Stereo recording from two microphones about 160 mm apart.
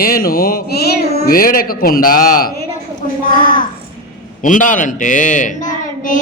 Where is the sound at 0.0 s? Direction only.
65° left (ahead or behind).